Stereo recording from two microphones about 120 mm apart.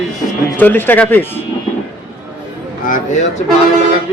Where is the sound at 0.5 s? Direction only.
15° left (ahead or behind).